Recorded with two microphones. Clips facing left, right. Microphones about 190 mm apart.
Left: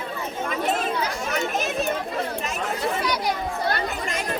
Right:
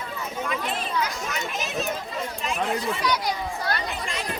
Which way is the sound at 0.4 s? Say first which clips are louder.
Left 5 dB; 45° left (ahead or behind).